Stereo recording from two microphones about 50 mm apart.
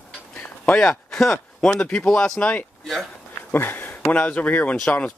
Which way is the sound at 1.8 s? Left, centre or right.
Left.